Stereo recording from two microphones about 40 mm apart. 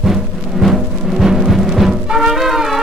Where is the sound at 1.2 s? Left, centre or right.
Centre.